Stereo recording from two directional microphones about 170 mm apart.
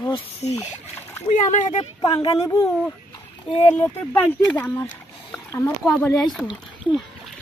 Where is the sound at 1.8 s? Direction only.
30° left (ahead or behind).